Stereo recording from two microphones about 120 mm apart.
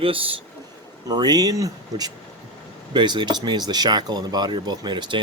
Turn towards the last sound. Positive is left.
turn(degrees=-40)  # may be behind; listen again after turning